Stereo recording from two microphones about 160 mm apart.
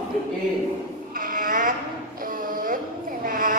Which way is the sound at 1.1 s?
60° right (ahead or behind).